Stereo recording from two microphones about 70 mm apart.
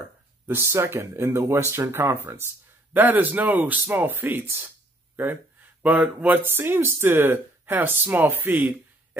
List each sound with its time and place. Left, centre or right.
0.5 s speech: right
2.9 s speech: right